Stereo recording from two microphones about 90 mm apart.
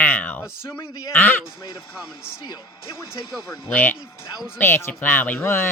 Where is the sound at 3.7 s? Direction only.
20° left (ahead or behind).